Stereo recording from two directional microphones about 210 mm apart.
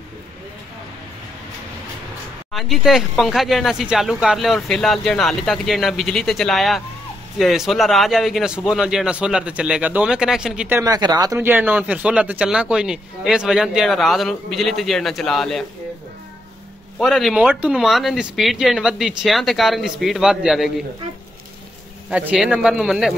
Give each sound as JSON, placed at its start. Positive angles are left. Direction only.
{"t": 2.5, "sound": "speech", "side_deg": 0}
{"t": 10.8, "sound": "speech", "side_deg": -20}
{"t": 17.0, "sound": "speech", "side_deg": 0}
{"t": 22.1, "sound": "speech", "side_deg": -5}